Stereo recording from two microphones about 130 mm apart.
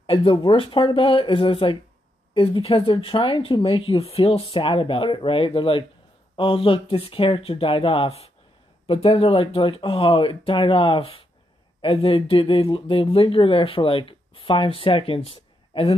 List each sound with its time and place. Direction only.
0.0 s speech: 45° left (ahead or behind)